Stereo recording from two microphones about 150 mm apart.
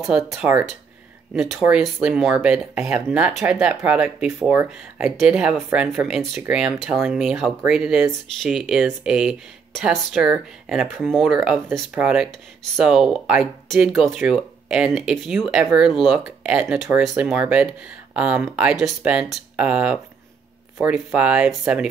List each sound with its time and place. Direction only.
0.4 s speech: 10° right (ahead or behind)